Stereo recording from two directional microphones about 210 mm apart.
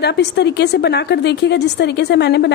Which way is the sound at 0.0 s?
55° left (ahead or behind).